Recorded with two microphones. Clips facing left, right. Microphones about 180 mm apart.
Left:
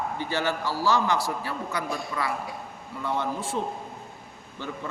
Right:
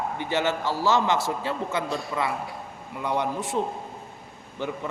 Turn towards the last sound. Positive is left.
turn(degrees=-20)  # may be behind; listen again after turning